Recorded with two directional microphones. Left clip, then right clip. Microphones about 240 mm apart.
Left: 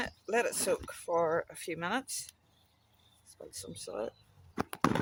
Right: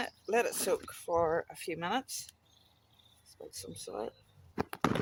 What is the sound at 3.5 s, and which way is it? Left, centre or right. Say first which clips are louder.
Speech: left 1 dB; centre.